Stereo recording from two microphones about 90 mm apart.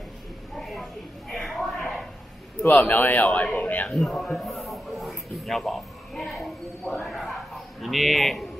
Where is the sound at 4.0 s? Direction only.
5° left (ahead or behind).